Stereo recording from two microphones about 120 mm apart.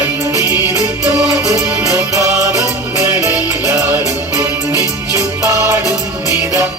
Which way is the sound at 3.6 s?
10° right (ahead or behind).